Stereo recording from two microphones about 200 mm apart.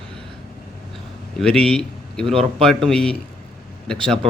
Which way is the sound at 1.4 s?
5° left (ahead or behind).